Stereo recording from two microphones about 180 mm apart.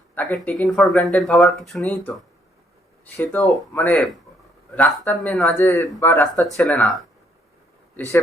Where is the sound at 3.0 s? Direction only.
10° left (ahead or behind).